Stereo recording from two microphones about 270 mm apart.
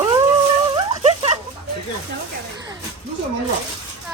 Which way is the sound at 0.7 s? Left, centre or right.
Centre.